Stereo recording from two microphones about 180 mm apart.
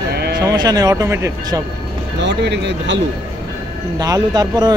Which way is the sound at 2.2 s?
75° right (ahead or behind).